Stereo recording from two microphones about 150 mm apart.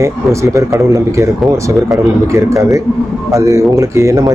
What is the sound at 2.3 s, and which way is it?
Speech, 20° right (ahead or behind).